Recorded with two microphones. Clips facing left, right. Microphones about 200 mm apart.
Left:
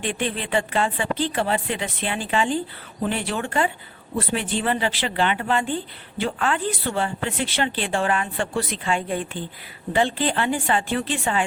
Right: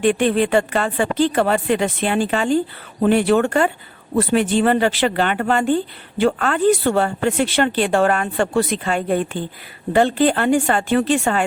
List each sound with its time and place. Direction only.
0.1 s speech: 50° right (ahead or behind)